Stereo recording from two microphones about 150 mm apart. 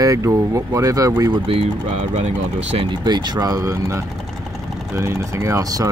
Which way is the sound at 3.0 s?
30° right (ahead or behind).